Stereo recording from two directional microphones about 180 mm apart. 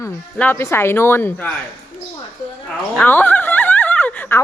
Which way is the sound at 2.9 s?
10° left (ahead or behind).